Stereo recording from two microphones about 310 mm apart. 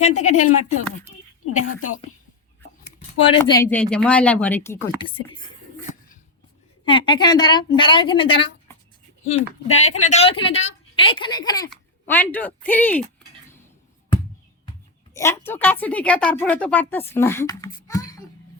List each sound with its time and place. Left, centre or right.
0.0 s speech: left
1.5 s a woman's voice: left
3.2 s speech: centre
6.8 s a woman's voice: centre
15.1 s speech: centre